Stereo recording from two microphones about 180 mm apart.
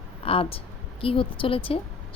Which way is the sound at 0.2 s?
30° left (ahead or behind).